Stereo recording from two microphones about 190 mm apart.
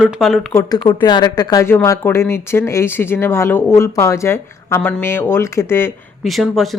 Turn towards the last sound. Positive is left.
turn(degrees=0)  # may be behind; listen again after turning